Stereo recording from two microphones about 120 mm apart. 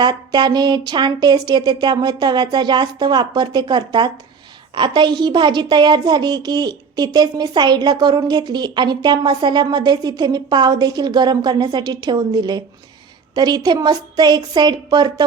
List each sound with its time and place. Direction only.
0.0 s a child's voice: 35° right (ahead or behind)